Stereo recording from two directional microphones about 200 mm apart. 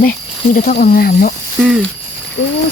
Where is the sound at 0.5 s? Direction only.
40° left (ahead or behind).